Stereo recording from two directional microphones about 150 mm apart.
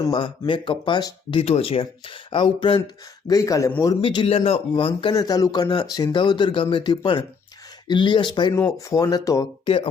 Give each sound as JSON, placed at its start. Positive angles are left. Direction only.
{"t": 0.1, "sound": "speech", "side_deg": 30}
{"t": 3.2, "sound": "speech", "side_deg": 25}
{"t": 4.0, "sound": "speech", "side_deg": 35}
{"t": 5.1, "sound": "speech", "side_deg": 25}